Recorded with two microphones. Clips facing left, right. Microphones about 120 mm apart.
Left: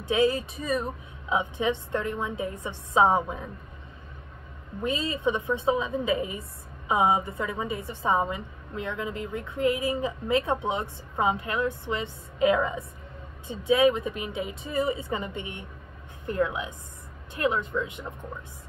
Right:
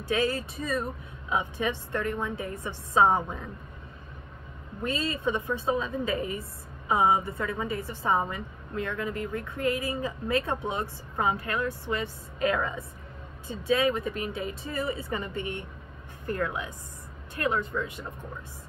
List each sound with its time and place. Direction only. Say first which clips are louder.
0.0 s a woman's voice: left 4 dB; 20° left (ahead or behind)
4.8 s a woman's voice: left 2 dB; 20° left (ahead or behind)